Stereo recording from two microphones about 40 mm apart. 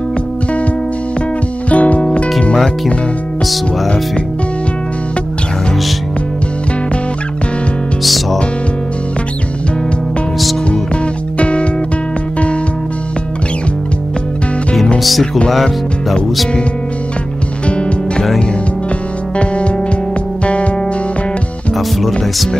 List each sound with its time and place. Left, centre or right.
1.7 s music: left
8.0 s music: centre
11.3 s music: left
15.0 s music: centre
17.6 s music: left
19.3 s music: left
21.7 s speech: centre